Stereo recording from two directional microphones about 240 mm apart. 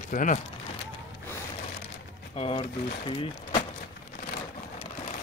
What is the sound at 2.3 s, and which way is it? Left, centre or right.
Speech, left.